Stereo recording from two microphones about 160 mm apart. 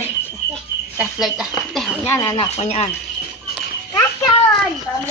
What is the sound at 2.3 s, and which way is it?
Speech, 40° left (ahead or behind).